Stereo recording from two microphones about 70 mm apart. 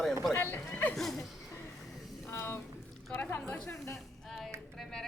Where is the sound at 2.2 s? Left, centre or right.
Left.